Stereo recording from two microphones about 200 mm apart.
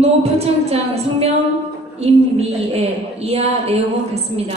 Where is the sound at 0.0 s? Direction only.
30° right (ahead or behind).